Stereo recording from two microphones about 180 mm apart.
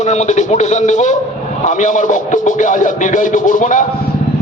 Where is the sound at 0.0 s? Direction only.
40° left (ahead or behind).